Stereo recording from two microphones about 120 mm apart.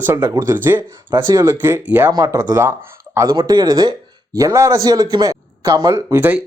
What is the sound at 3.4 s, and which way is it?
Speech, 35° right (ahead or behind).